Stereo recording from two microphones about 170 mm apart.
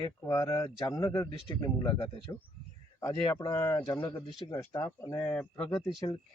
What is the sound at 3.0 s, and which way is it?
A man's voice, 15° left (ahead or behind).